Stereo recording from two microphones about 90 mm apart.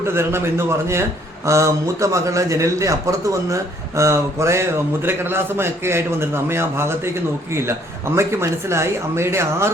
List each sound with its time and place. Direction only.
0.0 s a man's voice: 30° right (ahead or behind)